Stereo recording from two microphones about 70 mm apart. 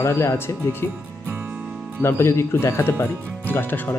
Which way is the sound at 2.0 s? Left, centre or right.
Left.